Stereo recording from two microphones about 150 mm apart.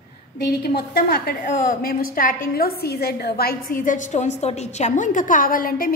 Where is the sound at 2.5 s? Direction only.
90° left.